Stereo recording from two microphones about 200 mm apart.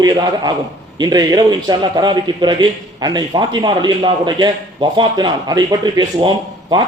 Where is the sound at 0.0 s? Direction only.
20° right (ahead or behind).